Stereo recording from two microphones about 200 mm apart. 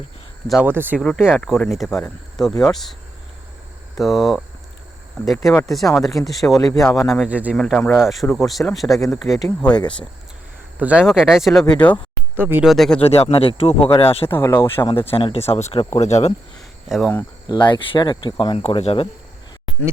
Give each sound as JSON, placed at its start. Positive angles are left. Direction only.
{"t": 0.4, "sound": "speech", "side_deg": -5}
{"t": 1.0, "sound": "speech", "side_deg": 5}
{"t": 4.0, "sound": "speech", "side_deg": 0}
{"t": 7.5, "sound": "speech", "side_deg": 5}
{"t": 9.0, "sound": "speech", "side_deg": 15}
{"t": 10.8, "sound": "speech", "side_deg": -5}
{"t": 11.6, "sound": "speech", "side_deg": 20}
{"t": 12.4, "sound": "speech", "side_deg": -10}
{"t": 13.0, "sound": "speech", "side_deg": 30}
{"t": 14.3, "sound": "speech", "side_deg": 10}
{"t": 16.6, "sound": "a sound", "side_deg": 0}
{"t": 17.4, "sound": "speech", "side_deg": 25}